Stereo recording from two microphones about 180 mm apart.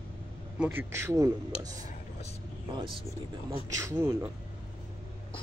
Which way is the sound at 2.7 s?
25° right (ahead or behind).